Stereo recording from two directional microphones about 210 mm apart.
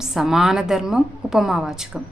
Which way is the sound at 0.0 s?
Centre (ahead or behind).